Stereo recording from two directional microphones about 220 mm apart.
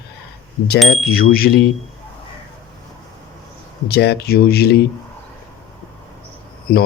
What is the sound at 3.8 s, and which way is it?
Speech, 45° left (ahead or behind).